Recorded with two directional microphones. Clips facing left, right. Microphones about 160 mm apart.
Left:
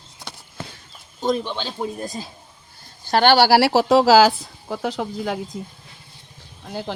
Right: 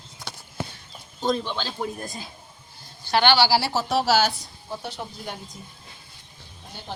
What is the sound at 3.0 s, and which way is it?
Speech, 45° left (ahead or behind).